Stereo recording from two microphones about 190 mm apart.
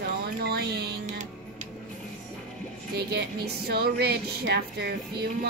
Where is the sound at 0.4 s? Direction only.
60° right (ahead or behind).